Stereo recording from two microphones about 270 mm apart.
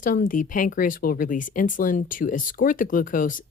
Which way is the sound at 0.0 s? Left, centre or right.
Left.